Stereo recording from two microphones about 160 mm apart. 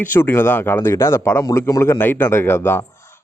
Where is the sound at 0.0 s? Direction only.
15° left (ahead or behind).